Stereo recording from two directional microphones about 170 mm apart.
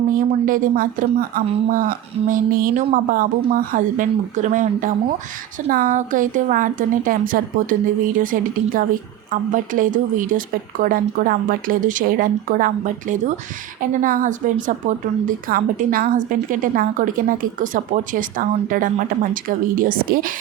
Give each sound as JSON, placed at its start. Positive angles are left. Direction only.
{"t": 0.1, "sound": "a woman's voice", "side_deg": -55}